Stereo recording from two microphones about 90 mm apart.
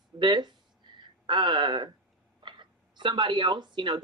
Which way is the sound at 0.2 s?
60° right (ahead or behind).